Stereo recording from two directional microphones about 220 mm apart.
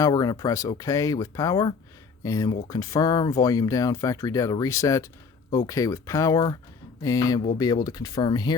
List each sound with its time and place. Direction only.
0.0 s speech: 15° left (ahead or behind)